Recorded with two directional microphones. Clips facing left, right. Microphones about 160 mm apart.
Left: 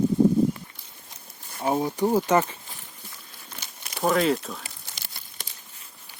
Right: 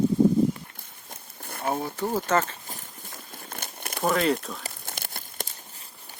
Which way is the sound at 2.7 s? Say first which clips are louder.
Right 4 dB; 45° right (ahead or behind).